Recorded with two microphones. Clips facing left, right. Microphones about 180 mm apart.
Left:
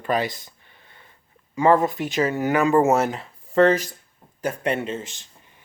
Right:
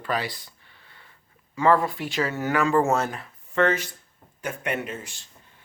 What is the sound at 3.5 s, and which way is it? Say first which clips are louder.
Speech: left 6 dB; 35° left (ahead or behind).